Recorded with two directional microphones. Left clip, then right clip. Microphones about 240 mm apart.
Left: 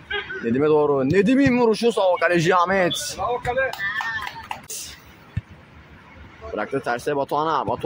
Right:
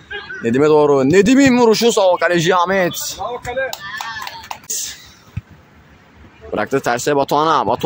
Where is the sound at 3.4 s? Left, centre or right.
Right.